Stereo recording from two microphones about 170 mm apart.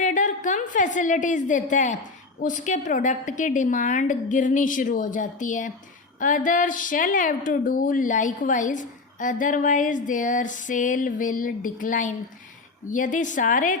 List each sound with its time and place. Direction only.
0.0 s a woman's voice: 45° left (ahead or behind)